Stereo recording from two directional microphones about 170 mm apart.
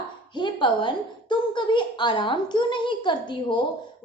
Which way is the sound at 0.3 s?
25° left (ahead or behind).